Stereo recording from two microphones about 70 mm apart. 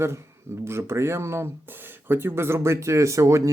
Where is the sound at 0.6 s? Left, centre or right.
Right.